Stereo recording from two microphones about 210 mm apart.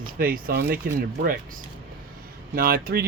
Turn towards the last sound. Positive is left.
turn(degrees=-45)  # may be behind; listen again after turning